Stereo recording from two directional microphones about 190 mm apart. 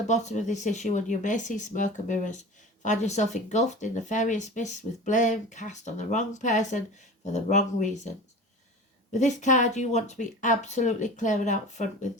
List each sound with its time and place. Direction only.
0.1 s speech: 40° left (ahead or behind)
9.1 s speech: 40° left (ahead or behind)